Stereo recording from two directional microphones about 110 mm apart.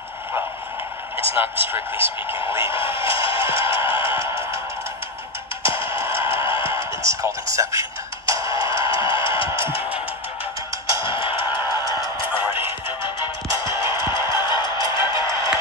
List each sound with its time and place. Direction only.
1.3 s speech: 20° right (ahead or behind)
2.0 s speech: 55° left (ahead or behind)
5.6 s a sound: 55° left (ahead or behind)
7.0 s speech: 30° right (ahead or behind)
8.5 s music: 50° left (ahead or behind)
11.0 s a sound: 50° left (ahead or behind)
11.9 s music: 50° left (ahead or behind)